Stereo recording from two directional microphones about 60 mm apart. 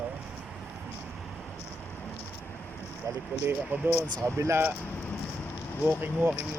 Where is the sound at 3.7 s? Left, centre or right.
Right.